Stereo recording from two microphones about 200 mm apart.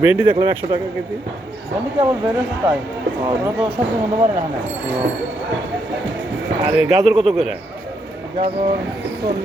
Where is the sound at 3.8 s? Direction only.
30° right (ahead or behind).